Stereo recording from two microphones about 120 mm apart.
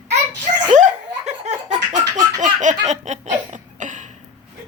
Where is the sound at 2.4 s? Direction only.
90° right.